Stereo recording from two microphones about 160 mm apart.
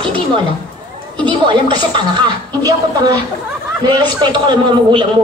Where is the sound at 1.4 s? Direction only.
30° right (ahead or behind).